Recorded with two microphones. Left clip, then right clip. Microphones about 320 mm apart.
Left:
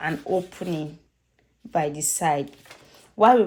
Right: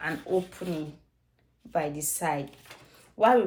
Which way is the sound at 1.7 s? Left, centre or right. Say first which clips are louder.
Left 5 dB; left.